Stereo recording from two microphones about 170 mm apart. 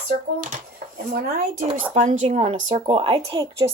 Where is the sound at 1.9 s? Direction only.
45° right (ahead or behind); by 3.6 s 30° right (ahead or behind).